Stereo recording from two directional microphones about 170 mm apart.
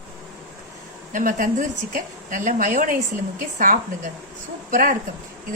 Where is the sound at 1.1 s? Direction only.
50° right (ahead or behind).